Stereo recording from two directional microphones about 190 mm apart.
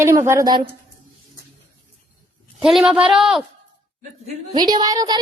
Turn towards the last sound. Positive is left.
turn(degrees=-20)  # may be behind; listen again after turning